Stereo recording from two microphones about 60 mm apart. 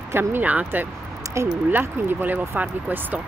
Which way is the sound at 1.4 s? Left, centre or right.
Right.